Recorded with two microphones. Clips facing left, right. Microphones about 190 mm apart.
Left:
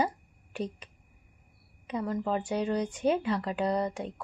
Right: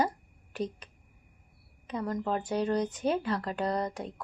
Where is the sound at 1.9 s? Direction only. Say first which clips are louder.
Left 1 dB; 10° left (ahead or behind).